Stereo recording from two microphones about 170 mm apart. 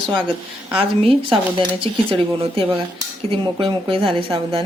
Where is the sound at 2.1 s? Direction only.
30° right (ahead or behind).